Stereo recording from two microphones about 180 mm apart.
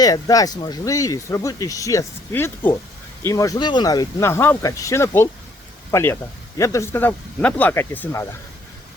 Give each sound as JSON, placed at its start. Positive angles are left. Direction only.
{"t": 0.0, "sound": "speech", "side_deg": 20}